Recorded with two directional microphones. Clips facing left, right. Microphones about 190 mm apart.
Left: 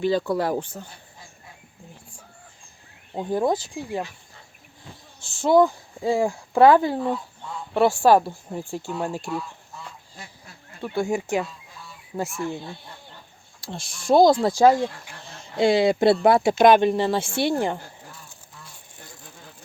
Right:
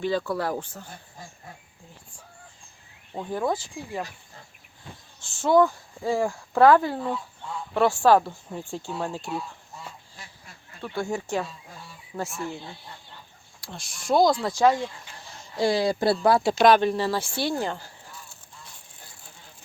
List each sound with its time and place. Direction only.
0.0 s speech: 15° left (ahead or behind)
3.2 s speech: 20° left (ahead or behind)
5.4 s speech: 15° left (ahead or behind)
10.8 s speech: 10° left (ahead or behind)
13.6 s speech: 25° left (ahead or behind)